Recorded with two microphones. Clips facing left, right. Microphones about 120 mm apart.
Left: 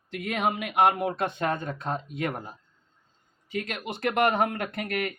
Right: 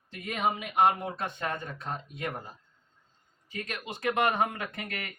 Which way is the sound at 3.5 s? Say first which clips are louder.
Left 5 dB; 70° left (ahead or behind).